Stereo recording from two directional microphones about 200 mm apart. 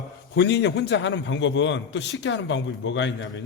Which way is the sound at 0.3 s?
60° left (ahead or behind).